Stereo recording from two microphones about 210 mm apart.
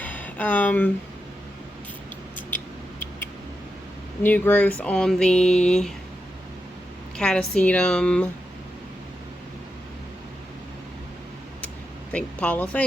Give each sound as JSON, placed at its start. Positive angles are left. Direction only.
{"t": 0.0, "sound": "a sound", "side_deg": 10}
{"t": 4.2, "sound": "speech", "side_deg": 10}
{"t": 7.2, "sound": "speech", "side_deg": 5}
{"t": 12.1, "sound": "speech", "side_deg": 5}